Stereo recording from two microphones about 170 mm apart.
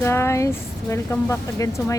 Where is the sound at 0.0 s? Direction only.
15° left (ahead or behind).